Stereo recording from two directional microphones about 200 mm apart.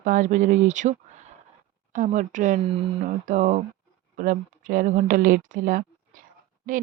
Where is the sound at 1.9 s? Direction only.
40° right (ahead or behind).